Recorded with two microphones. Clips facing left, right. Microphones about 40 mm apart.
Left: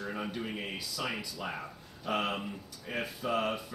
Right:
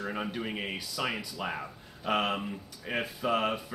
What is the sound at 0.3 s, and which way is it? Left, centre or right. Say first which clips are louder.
A man's voice: right 3 dB; right.